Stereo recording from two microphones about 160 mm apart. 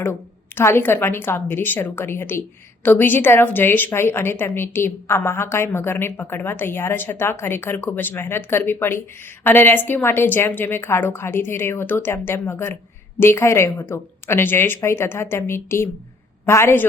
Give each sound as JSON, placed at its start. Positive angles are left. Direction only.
{"t": 0.0, "sound": "a woman's voice", "side_deg": 15}